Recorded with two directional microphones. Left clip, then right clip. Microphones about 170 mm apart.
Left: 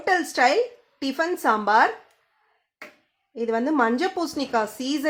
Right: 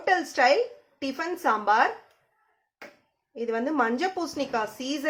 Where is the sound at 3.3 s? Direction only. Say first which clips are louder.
Left 4 dB; 55° left (ahead or behind).